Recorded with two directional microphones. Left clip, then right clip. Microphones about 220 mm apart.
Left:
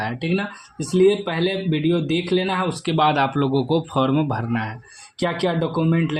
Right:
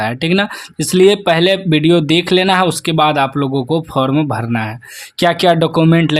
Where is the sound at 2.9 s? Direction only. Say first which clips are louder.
Right 2 dB; 25° right (ahead or behind).